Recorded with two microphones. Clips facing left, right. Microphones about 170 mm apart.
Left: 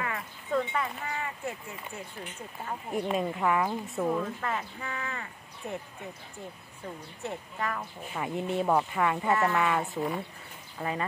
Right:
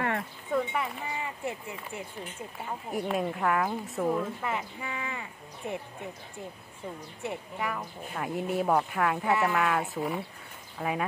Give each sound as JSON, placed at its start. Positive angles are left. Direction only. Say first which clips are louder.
{"t": 0.5, "sound": "speech", "louder": "even", "side_deg": -10}
{"t": 3.1, "sound": "speech", "louder": "even", "side_deg": 0}
{"t": 7.2, "sound": "speech", "louder": "right 1 dB", "side_deg": -10}